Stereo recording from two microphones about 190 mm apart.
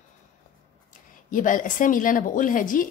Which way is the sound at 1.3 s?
45° left (ahead or behind).